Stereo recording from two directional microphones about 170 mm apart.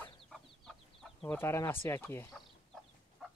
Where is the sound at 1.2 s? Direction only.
15° left (ahead or behind).